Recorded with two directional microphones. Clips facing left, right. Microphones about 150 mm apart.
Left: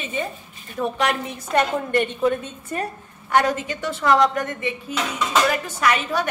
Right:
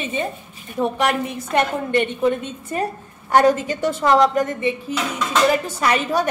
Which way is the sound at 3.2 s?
35° right (ahead or behind).